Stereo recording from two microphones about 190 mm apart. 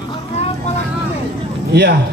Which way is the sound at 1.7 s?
60° right (ahead or behind).